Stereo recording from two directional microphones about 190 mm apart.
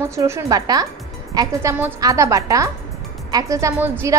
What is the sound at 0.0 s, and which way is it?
A woman's voice, 15° right (ahead or behind).